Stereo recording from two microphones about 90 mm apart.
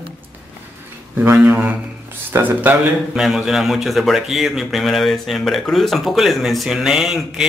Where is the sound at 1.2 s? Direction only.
20° right (ahead or behind).